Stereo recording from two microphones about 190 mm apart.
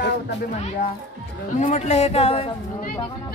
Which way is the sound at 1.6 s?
40° left (ahead or behind).